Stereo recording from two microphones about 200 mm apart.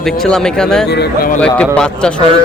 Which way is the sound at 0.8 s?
55° left (ahead or behind).